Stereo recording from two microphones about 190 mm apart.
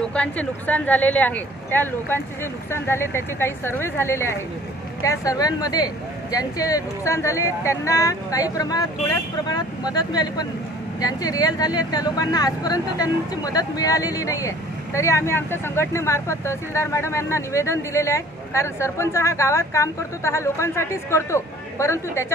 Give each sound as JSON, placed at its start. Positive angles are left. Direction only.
{"t": 0.0, "sound": "speech", "side_deg": 5}